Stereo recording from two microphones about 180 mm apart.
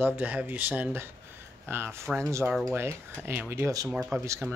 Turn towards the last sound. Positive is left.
turn(degrees=-15)  # may be behind; listen again after turning